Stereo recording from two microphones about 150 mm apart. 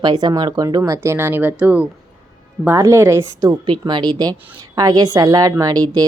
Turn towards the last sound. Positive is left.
turn(degrees=-25)  # may be behind; listen again after turning